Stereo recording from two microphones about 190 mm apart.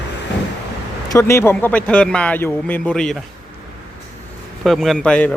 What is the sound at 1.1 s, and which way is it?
Speech, 15° left (ahead or behind).